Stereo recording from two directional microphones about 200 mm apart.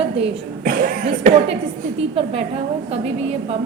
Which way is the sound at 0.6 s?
45° right (ahead or behind).